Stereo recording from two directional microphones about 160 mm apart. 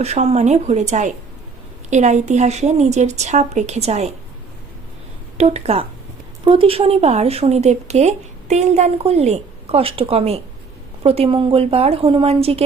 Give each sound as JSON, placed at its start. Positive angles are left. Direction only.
{"t": 0.0, "sound": "a woman's voice", "side_deg": -40}
{"t": 5.4, "sound": "speech", "side_deg": -40}